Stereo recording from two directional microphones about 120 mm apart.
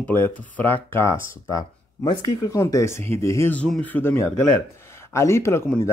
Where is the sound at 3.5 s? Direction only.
10° left (ahead or behind).